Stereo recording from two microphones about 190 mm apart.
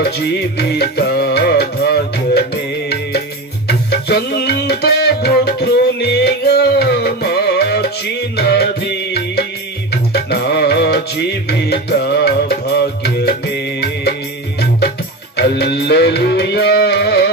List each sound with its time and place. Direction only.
0.0 s music: 60° left (ahead or behind)
3.7 s music: 60° left (ahead or behind)
15.4 s music: 60° left (ahead or behind)